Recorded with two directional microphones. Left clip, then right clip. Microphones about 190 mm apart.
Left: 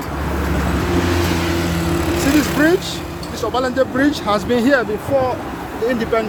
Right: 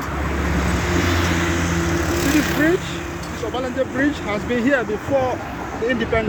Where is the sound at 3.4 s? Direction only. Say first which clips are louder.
Left 6 dB; 25° left (ahead or behind).